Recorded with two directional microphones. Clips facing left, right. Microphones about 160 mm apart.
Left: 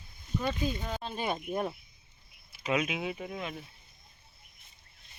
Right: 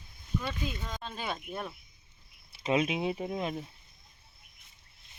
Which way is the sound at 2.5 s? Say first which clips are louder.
Right 2 dB; 30° right (ahead or behind).